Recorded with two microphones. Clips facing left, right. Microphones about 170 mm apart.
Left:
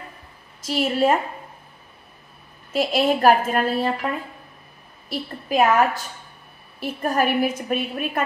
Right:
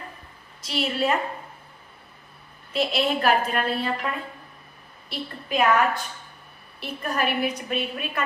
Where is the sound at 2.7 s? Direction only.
45° left (ahead or behind).